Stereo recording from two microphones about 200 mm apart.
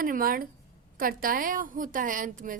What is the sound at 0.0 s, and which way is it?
A woman's voice, 45° right (ahead or behind).